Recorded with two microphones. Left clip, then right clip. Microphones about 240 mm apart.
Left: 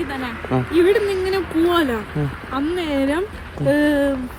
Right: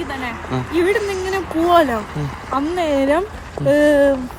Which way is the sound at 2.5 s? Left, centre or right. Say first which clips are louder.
Right 4 dB; centre.